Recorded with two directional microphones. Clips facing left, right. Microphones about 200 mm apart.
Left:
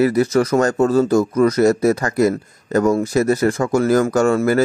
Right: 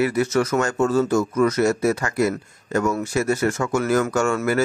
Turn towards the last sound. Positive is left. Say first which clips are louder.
# left 5 dB
turn(degrees=35)  # may be behind; listen again after turning